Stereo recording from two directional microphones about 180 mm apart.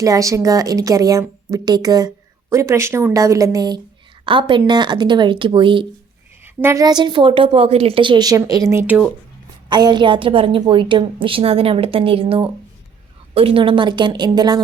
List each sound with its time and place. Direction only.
0.0 s a woman's voice: 20° right (ahead or behind)
6.4 s a woman's voice: 15° right (ahead or behind)
9.6 s a woman's voice: 25° right (ahead or behind)